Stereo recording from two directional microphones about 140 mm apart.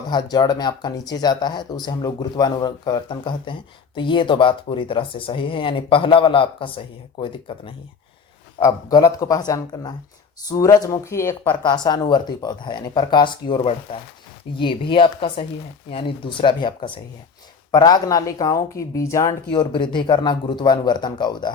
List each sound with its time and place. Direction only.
0.1 s speech: 30° left (ahead or behind)
11.7 s speech: 30° left (ahead or behind)
14.6 s speech: 35° left (ahead or behind)